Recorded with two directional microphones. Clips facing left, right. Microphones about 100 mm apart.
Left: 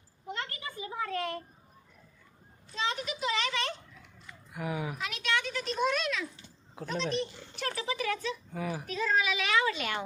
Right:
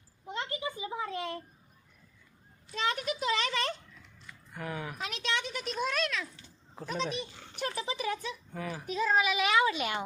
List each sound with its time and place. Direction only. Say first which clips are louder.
0.3 s a sound: right 3 dB; 20° right (ahead or behind)
2.7 s speech: right 2 dB; 50° right (ahead or behind)
4.3 s a sound: left 3 dB; 10° left (ahead or behind)
4.9 s speech: even; 40° right (ahead or behind)
5.3 s speech: left 3 dB; 20° right (ahead or behind)
5.6 s a child's voice: left 2 dB; centre (ahead or behind); by 8.3 s 20° right (ahead or behind)
8.5 s a child's voice: left 3 dB; 10° left (ahead or behind)
8.9 s a child's voice: right 3 dB; 10° right (ahead or behind)